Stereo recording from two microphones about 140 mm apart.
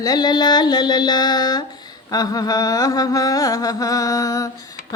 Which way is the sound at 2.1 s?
25° left (ahead or behind).